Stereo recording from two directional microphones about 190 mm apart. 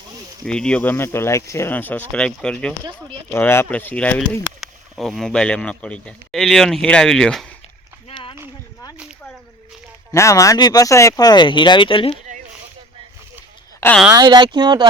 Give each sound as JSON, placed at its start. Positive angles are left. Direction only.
{"t": 0.4, "sound": "speech", "side_deg": 5}
{"t": 8.0, "sound": "a sound", "side_deg": 25}
{"t": 10.1, "sound": "speech", "side_deg": 15}
{"t": 14.1, "sound": "speech", "side_deg": -20}